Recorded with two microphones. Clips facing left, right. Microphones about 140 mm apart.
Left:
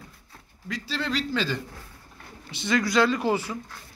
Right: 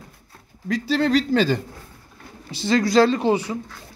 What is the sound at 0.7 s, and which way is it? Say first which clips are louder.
Speech: right 10 dB; 45° right (ahead or behind).